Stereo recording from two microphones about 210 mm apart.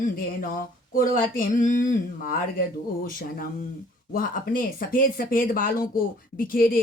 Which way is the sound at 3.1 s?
40° left (ahead or behind).